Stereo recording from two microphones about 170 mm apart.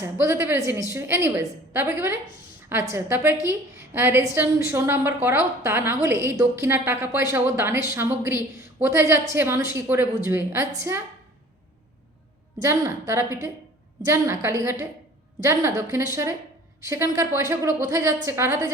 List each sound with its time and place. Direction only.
0.0 s a woman's voice: 15° right (ahead or behind)
12.5 s a woman's voice: 20° right (ahead or behind)